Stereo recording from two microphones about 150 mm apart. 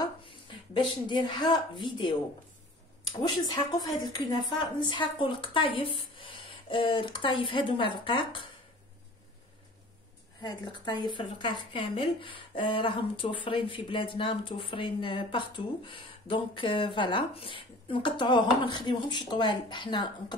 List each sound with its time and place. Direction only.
0.0 s speech: 30° left (ahead or behind)
10.4 s speech: 30° left (ahead or behind)